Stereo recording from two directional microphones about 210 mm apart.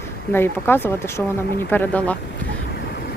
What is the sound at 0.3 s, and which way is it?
Speech, 10° left (ahead or behind).